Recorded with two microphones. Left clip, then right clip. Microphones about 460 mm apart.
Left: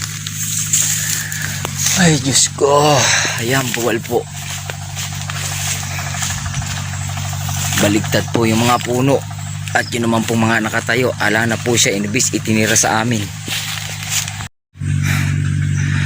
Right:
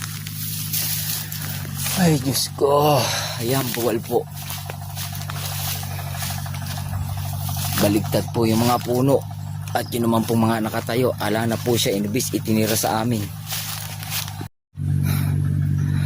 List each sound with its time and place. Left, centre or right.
2.0 s speech: left
7.8 s speech: left